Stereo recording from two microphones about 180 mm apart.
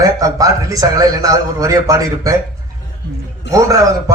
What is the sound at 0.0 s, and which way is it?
A man's voice, 20° right (ahead or behind).